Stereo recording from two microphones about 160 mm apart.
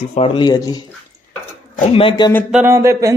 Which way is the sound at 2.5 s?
10° right (ahead or behind).